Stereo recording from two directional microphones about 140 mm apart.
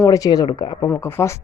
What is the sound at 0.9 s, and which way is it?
Speech, 15° left (ahead or behind).